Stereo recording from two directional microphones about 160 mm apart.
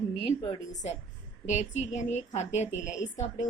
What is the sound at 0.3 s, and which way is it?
A woman's voice, 50° left (ahead or behind).